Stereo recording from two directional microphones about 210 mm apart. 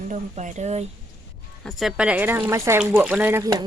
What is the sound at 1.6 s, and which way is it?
Speech, centre (ahead or behind).